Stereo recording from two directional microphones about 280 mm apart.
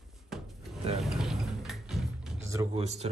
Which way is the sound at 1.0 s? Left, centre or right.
Centre.